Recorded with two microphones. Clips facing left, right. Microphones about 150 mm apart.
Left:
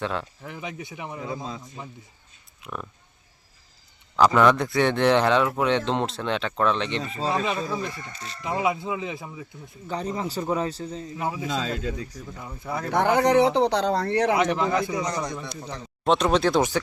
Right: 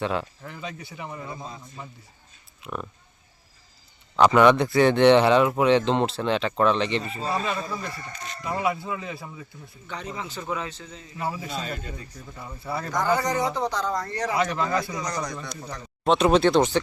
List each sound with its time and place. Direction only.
0.0 s speech: centre (ahead or behind)
0.4 s speech: 15° left (ahead or behind)
2.6 s speech: centre (ahead or behind)
4.4 s speech: centre (ahead or behind)
7.3 s speech: 20° left (ahead or behind)
9.8 s a man's voice: 35° left (ahead or behind)
11.4 s speech: 90° left
12.4 s speech: centre (ahead or behind)
12.9 s speech: 65° left (ahead or behind)
14.3 s speech: 20° left (ahead or behind)
16.0 s speech: centre (ahead or behind)